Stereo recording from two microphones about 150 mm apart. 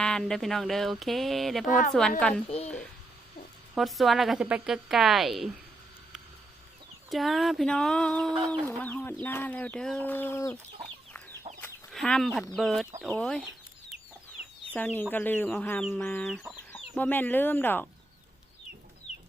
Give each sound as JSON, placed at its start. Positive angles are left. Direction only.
{"t": 0.0, "sound": "speech", "side_deg": 5}
{"t": 2.5, "sound": "a woman's voice", "side_deg": 45}
{"t": 3.8, "sound": "speech", "side_deg": 0}
{"t": 7.1, "sound": "speech", "side_deg": 0}
{"t": 11.5, "sound": "chicken", "side_deg": -45}
{"t": 11.9, "sound": "speech", "side_deg": 0}
{"t": 14.7, "sound": "speech", "side_deg": 10}